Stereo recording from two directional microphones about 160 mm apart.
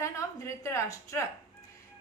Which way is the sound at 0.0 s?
20° left (ahead or behind).